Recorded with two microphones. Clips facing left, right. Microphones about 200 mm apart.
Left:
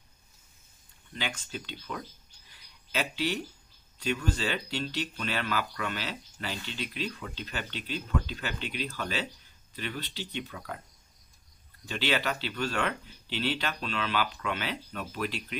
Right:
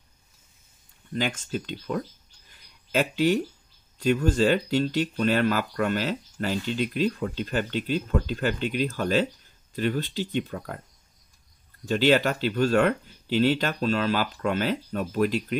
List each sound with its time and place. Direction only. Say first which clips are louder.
1.1 s speech: right 9 dB; 45° right (ahead or behind)
2.5 s a sound: right 8 dB; 45° right (ahead or behind)
4.0 s speech: right 9 dB; 45° right (ahead or behind)
11.8 s speech: right 10 dB; 45° right (ahead or behind)